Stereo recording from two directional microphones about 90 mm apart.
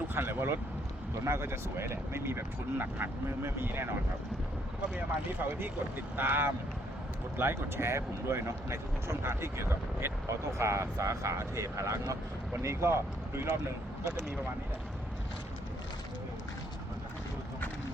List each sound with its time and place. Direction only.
0.1 s speech: 25° right (ahead or behind)
4.9 s speech: 25° right (ahead or behind)